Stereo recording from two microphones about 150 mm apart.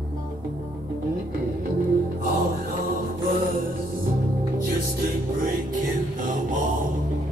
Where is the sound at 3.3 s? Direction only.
70° right (ahead or behind).